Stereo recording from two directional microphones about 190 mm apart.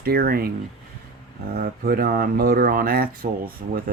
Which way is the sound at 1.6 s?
50° right (ahead or behind).